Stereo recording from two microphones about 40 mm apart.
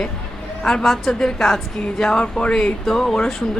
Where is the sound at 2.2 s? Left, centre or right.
Left.